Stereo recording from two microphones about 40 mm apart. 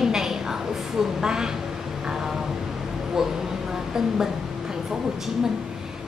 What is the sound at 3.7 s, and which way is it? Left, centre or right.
Speech, centre.